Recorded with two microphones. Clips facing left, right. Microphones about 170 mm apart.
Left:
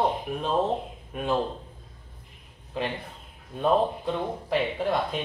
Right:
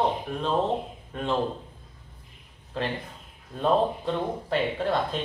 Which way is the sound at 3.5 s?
5° left (ahead or behind).